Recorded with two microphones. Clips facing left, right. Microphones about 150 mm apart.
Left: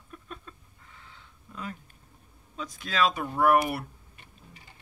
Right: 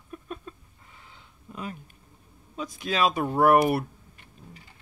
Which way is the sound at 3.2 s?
35° right (ahead or behind).